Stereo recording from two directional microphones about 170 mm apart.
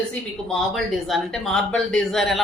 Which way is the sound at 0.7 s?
Centre (ahead or behind).